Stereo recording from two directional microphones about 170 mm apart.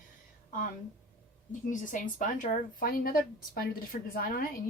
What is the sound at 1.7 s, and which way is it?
A woman's voice, 50° left (ahead or behind).